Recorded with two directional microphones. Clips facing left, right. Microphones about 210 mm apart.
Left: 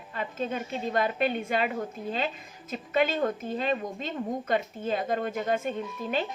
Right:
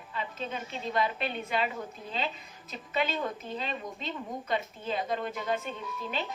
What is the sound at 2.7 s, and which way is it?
Speech, 50° left (ahead or behind).